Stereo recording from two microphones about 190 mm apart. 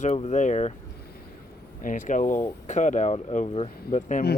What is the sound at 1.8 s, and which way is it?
Speech, 45° left (ahead or behind).